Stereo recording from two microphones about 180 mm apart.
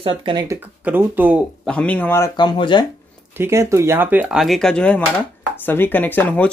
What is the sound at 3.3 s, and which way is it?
Speech, 15° right (ahead or behind).